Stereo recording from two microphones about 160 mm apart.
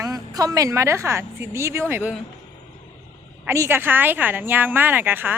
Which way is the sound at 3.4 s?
15° right (ahead or behind).